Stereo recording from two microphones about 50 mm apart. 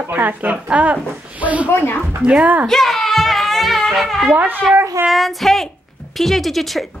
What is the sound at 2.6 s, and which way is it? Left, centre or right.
Music, centre.